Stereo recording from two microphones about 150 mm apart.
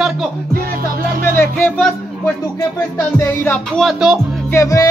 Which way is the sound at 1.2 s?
15° left (ahead or behind).